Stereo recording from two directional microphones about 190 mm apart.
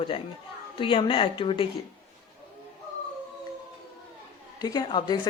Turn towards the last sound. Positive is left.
turn(degrees=25)  # may be behind; listen again after turning